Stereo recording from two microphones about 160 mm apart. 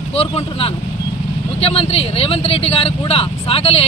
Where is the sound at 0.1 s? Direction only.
40° left (ahead or behind).